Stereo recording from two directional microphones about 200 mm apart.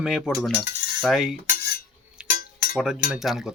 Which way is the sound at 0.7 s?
40° left (ahead or behind).